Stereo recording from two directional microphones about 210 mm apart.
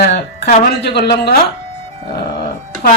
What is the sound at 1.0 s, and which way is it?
Speech, 50° left (ahead or behind).